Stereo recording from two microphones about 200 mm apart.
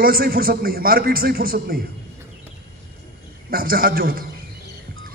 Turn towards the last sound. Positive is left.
turn(degrees=-50)  # may be behind; listen again after turning